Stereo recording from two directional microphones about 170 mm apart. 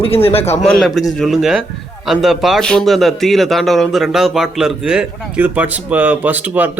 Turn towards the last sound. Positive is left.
turn(degrees=-10)  # may be behind; listen again after turning